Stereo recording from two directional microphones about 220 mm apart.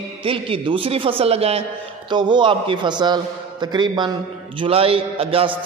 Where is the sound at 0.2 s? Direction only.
25° right (ahead or behind).